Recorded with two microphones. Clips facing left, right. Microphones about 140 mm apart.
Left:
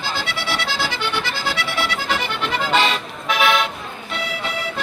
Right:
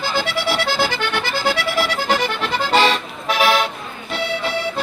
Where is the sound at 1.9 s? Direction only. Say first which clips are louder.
Right 4 dB; 45° right (ahead or behind).